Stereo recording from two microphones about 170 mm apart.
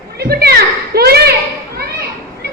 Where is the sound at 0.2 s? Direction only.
70° right (ahead or behind).